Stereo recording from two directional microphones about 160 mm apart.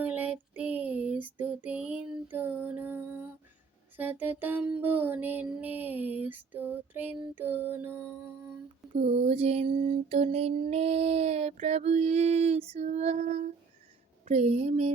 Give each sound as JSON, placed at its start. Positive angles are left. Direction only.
{"t": 0.0, "sound": "female singing", "side_deg": -10}
{"t": 3.9, "sound": "music", "side_deg": -10}
{"t": 9.0, "sound": "a sound", "side_deg": -40}